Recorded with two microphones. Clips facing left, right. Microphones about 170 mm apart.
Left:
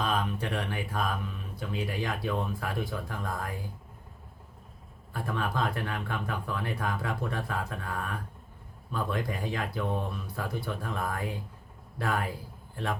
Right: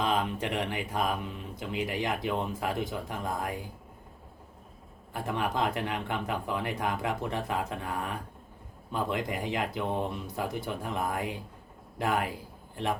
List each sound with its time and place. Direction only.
0.0 s speech: 20° right (ahead or behind)
5.1 s a man's voice: 20° right (ahead or behind)